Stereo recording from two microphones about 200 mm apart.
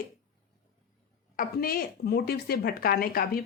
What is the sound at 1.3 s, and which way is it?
A woman's voice, 50° left (ahead or behind).